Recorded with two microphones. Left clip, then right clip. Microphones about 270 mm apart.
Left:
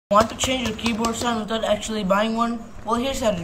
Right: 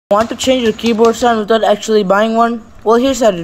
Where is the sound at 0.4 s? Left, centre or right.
Centre.